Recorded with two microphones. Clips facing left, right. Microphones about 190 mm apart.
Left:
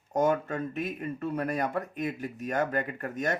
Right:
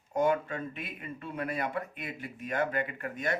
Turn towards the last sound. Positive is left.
turn(degrees=40)  # may be behind; listen again after turning